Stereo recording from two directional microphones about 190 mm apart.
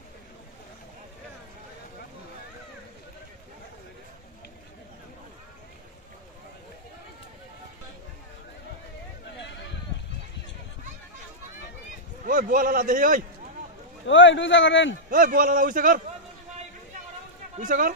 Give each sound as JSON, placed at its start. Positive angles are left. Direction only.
{"t": 9.4, "sound": "a sound", "side_deg": 70}
{"t": 12.3, "sound": "a man's voice", "side_deg": -45}
{"t": 14.0, "sound": "a man's voice", "side_deg": 75}
{"t": 15.0, "sound": "a man's voice", "side_deg": -45}
{"t": 17.6, "sound": "a man's voice", "side_deg": -45}